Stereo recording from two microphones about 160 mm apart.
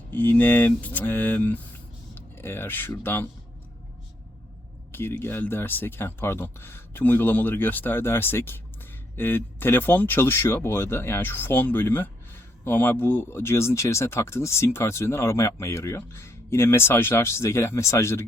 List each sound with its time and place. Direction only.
0.1 s speech: 10° left (ahead or behind)
2.1 s a sound: 15° left (ahead or behind)
2.9 s speech: 15° left (ahead or behind)
4.9 s speech: 15° left (ahead or behind)